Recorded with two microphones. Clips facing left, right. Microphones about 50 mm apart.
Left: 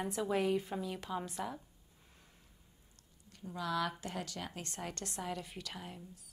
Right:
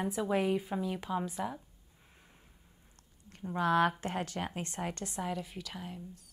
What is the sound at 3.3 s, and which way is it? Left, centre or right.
Speech, right.